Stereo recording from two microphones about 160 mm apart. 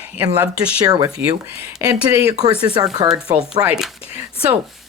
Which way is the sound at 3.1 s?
5° right (ahead or behind).